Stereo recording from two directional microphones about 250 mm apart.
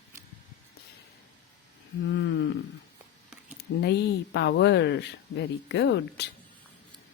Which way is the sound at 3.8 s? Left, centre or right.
Left.